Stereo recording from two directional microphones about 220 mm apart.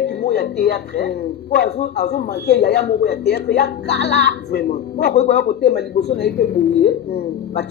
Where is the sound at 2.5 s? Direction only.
45° left (ahead or behind).